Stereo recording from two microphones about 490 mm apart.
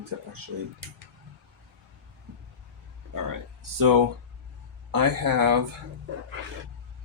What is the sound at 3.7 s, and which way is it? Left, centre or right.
Speech, right.